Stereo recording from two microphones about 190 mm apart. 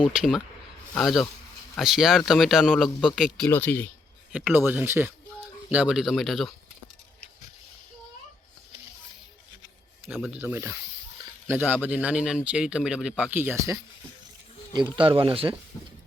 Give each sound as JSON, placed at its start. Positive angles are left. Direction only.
{"t": 0.0, "sound": "speech", "side_deg": -5}
{"t": 4.3, "sound": "speech", "side_deg": -10}
{"t": 10.1, "sound": "speech", "side_deg": 0}
{"t": 14.7, "sound": "speech", "side_deg": -25}